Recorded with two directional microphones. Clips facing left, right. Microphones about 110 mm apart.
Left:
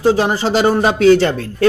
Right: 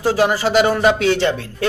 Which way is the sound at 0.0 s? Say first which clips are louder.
Left 2 dB; 25° left (ahead or behind).